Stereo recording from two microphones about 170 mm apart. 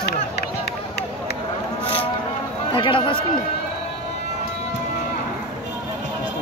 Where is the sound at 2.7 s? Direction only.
30° left (ahead or behind).